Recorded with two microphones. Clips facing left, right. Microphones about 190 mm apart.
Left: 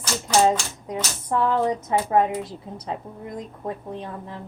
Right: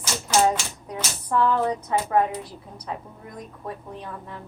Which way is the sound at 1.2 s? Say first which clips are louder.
Even; 20° left (ahead or behind).